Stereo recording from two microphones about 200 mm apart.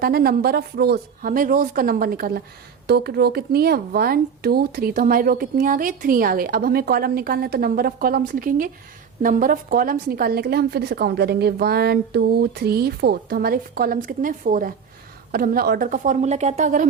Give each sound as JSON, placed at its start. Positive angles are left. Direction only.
{"t": 0.0, "sound": "a woman's voice", "side_deg": -45}